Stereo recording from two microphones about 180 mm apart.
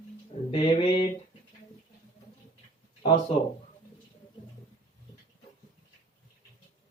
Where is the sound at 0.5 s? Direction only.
35° left (ahead or behind).